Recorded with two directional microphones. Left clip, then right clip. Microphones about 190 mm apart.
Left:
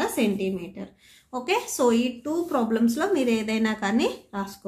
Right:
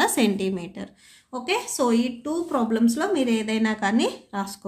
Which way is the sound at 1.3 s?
Centre (ahead or behind).